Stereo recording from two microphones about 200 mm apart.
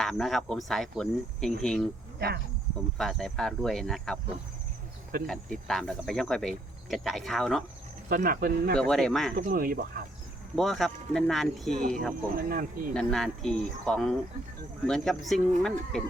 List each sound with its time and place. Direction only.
0.0 s cricket: centre (ahead or behind)
2.1 s speech: 55° right (ahead or behind)
3.0 s cricket: centre (ahead or behind)
5.2 s cricket: centre (ahead or behind)
8.1 s speech: 45° right (ahead or behind)
8.7 s cricket: 5° left (ahead or behind)
9.3 s speech: 45° right (ahead or behind)
10.5 s cricket: centre (ahead or behind)
12.4 s speech: 45° right (ahead or behind)
12.9 s cricket: 5° left (ahead or behind)